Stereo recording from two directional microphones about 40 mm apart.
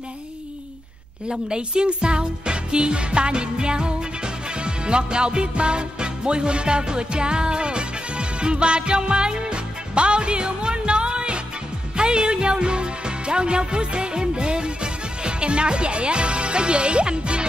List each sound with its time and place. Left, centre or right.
1.5 s music: right
12.0 s speech: right